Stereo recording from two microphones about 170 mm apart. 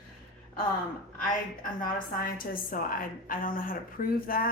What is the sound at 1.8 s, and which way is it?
A woman's voice, 55° left (ahead or behind).